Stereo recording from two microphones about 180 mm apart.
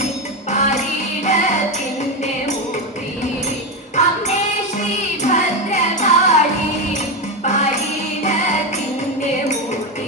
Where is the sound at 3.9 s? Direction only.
40° left (ahead or behind).